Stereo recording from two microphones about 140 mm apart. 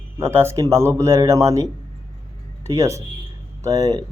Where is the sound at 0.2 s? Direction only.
20° right (ahead or behind).